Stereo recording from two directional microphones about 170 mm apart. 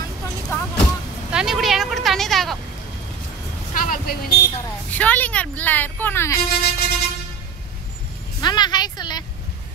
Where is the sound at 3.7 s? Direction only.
55° left (ahead or behind).